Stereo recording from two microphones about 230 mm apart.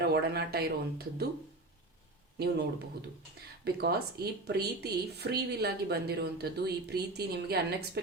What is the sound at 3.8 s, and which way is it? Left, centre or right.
Speech, right.